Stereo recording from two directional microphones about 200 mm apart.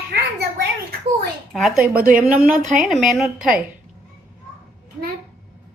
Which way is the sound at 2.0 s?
45° right (ahead or behind).